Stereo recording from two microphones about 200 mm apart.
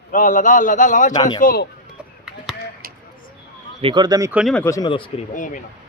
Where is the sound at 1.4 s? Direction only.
45° left (ahead or behind).